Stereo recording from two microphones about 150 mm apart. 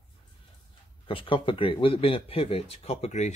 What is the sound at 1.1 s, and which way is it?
Speech, 35° left (ahead or behind).